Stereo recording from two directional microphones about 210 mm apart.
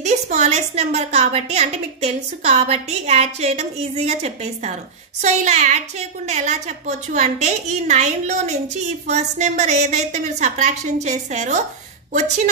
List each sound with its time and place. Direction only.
0.0 s a woman's voice: 35° right (ahead or behind)